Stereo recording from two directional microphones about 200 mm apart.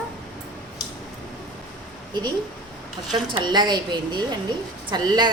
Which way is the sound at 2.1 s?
20° right (ahead or behind).